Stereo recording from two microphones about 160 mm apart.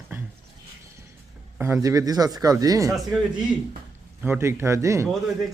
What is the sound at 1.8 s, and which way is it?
Speech, 20° right (ahead or behind).